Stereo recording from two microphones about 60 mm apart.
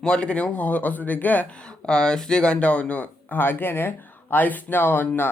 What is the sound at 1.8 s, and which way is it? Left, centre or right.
Speech, centre.